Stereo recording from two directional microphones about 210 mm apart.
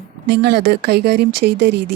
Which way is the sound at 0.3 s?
50° right (ahead or behind).